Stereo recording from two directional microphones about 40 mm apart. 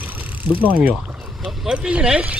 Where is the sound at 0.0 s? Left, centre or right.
Right.